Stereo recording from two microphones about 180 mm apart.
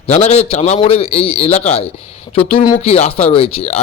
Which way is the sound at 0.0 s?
35° left (ahead or behind).